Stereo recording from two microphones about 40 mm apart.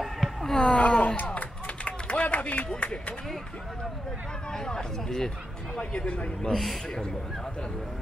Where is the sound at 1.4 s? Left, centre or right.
Left.